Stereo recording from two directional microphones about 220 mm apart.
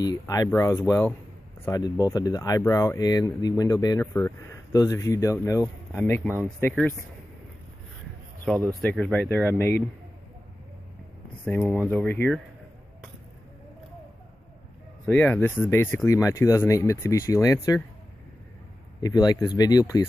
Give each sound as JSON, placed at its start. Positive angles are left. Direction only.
{"t": 0.0, "sound": "speech", "side_deg": 15}
{"t": 8.8, "sound": "speech", "side_deg": 5}
{"t": 11.4, "sound": "speech", "side_deg": 0}
{"t": 15.0, "sound": "speech", "side_deg": 10}
{"t": 18.9, "sound": "speech", "side_deg": 15}